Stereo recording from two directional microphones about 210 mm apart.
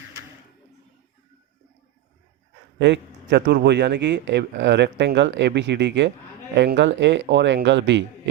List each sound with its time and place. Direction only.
2.7 s a man's voice: 55° right (ahead or behind)